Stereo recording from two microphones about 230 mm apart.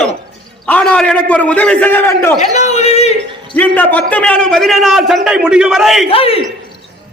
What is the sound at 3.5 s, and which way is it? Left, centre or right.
A man's voice, centre.